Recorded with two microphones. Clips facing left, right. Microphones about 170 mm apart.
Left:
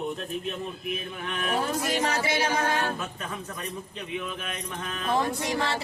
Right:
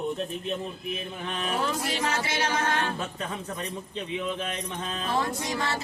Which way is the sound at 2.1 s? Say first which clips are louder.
Left 2 dB; 10° left (ahead or behind).